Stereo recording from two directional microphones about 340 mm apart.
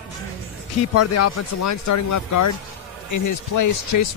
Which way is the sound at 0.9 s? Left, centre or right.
Left.